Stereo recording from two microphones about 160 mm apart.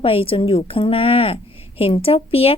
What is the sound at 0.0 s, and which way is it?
A woman's voice, 35° left (ahead or behind).